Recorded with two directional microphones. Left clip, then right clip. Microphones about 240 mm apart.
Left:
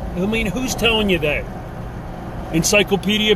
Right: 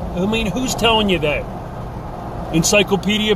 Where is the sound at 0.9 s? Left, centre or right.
Centre.